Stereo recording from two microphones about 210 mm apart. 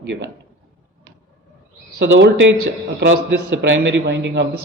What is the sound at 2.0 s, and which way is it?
Speech, 55° right (ahead or behind).